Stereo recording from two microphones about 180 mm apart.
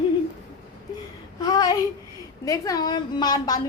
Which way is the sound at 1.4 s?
20° left (ahead or behind).